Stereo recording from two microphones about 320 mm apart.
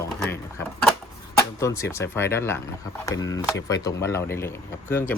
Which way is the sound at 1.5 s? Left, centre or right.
Centre.